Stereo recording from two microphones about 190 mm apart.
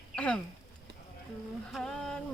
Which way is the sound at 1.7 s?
Centre (ahead or behind).